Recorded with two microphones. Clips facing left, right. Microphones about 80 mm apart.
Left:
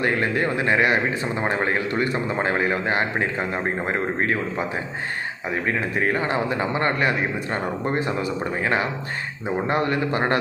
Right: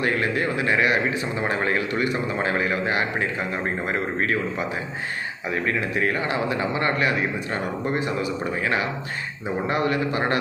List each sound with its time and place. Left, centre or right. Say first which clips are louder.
0.0 s a man's voice: left 1 dB; left